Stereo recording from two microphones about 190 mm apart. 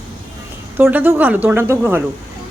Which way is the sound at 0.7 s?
10° right (ahead or behind).